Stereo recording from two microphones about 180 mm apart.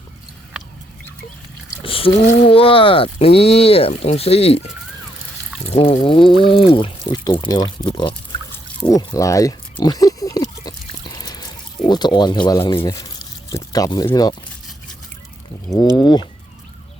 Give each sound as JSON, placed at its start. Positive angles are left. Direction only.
{"t": 1.8, "sound": "speech", "side_deg": 30}
{"t": 5.7, "sound": "speech", "side_deg": 35}
{"t": 8.8, "sound": "oink", "side_deg": 20}
{"t": 16.0, "sound": "speech", "side_deg": 25}